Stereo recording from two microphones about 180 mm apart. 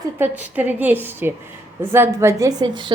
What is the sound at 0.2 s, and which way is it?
A woman's voice, 10° right (ahead or behind).